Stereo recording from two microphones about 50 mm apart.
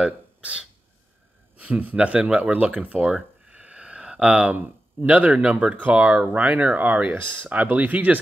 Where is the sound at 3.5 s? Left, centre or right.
Right.